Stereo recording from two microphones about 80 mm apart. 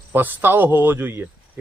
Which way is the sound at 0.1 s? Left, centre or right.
Right.